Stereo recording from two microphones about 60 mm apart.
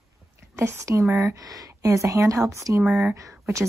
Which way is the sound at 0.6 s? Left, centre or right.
Right.